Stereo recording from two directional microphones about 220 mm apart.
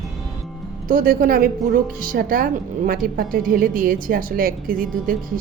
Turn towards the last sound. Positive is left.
turn(degrees=-40)  # may be behind; listen again after turning